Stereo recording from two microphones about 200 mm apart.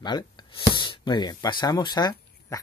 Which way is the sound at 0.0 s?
20° left (ahead or behind).